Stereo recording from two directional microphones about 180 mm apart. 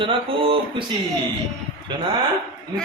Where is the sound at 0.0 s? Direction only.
30° right (ahead or behind).